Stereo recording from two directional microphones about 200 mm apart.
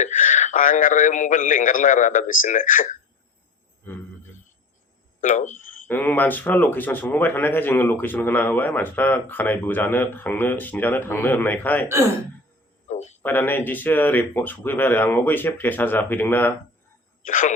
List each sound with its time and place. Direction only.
0.0 s speech: 40° left (ahead or behind)
3.9 s speech: 10° left (ahead or behind)
5.3 s speech: 40° left (ahead or behind)
5.9 s speech: 10° left (ahead or behind)
12.9 s a sound: 35° left (ahead or behind)
13.2 s speech: 10° left (ahead or behind)
17.2 s speech: 40° left (ahead or behind)